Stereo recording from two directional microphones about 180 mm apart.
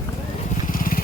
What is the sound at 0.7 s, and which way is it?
Vehicle, 50° left (ahead or behind).